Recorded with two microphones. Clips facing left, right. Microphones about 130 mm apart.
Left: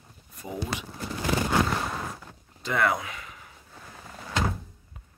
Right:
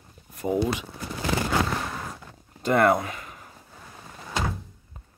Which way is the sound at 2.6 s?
50° right (ahead or behind).